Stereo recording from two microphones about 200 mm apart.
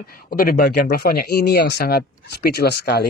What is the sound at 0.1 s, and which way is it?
Speech, 45° left (ahead or behind).